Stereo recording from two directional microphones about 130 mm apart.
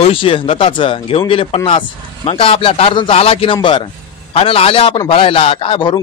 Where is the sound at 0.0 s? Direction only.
45° left (ahead or behind).